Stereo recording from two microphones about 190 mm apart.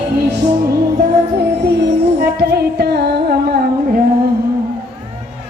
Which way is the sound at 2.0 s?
60° right (ahead or behind).